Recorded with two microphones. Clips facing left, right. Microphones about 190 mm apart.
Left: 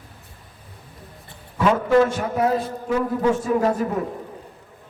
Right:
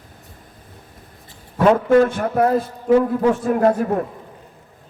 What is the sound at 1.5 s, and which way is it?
A man's voice, 50° right (ahead or behind).